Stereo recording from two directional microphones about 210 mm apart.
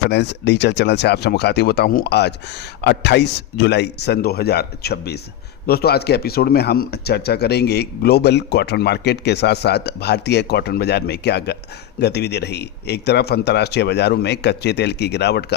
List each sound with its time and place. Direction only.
0.1 s speech: 55° left (ahead or behind)